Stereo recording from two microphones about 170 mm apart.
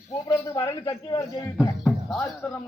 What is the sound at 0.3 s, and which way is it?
A man's voice, 20° left (ahead or behind).